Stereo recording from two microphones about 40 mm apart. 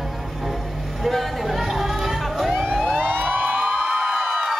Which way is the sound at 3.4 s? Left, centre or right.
Right.